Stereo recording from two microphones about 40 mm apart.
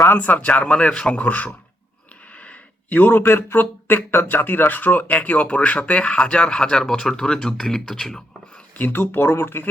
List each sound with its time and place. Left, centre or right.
0.2 s a man's voice: left
1.2 s a man's voice: left
2.3 s a sound: left
3.0 s speech: left
5.1 s speech: left; by 8.4 s centre
8.8 s speech: left